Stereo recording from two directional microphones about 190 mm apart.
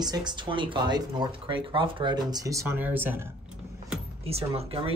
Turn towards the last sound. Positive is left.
turn(degrees=-30)  # may be behind; listen again after turning